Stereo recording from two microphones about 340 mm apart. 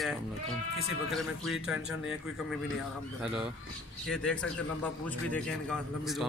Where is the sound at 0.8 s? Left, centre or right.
Centre.